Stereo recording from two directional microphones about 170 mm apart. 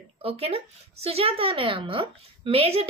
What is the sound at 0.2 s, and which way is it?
A woman's voice, 35° right (ahead or behind).